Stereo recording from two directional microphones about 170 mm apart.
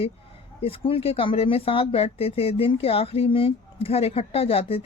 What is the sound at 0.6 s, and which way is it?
Speech, 35° left (ahead or behind).